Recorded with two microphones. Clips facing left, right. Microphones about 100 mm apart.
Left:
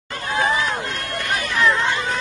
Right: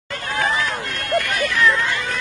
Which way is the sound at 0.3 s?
25° left (ahead or behind).